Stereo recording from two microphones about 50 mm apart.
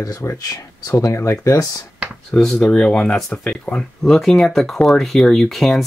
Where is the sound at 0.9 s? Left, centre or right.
Left.